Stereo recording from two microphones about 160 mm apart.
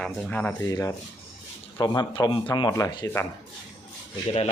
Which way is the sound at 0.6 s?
20° left (ahead or behind).